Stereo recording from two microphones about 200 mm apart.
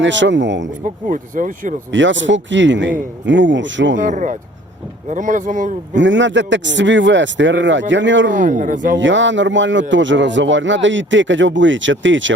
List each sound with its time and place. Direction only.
0.0 s speech: 65° right (ahead or behind)
0.9 s speech: 40° right (ahead or behind)
1.9 s a man's voice: 65° right (ahead or behind)
3.9 s speech: 40° right (ahead or behind)
6.0 s speech: 65° right (ahead or behind)
8.3 s speech: 40° right (ahead or behind)
9.0 s a man's voice: 65° right (ahead or behind)